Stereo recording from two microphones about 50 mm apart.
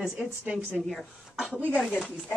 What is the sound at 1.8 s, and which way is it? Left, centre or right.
Speech, centre.